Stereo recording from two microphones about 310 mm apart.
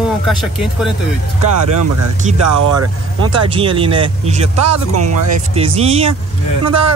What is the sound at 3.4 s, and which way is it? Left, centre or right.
Speech, centre.